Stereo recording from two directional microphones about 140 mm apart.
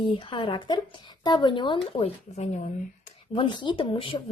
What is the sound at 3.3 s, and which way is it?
Speech, 35° left (ahead or behind).